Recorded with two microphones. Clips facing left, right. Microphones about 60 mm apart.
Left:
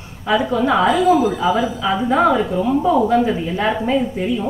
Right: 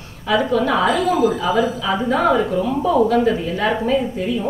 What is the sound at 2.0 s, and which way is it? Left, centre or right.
A woman's voice, left.